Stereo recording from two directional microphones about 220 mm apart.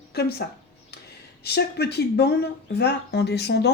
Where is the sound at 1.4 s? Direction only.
50° left (ahead or behind).